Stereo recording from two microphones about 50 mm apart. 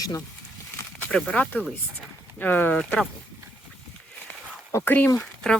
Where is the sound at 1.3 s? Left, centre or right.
Left.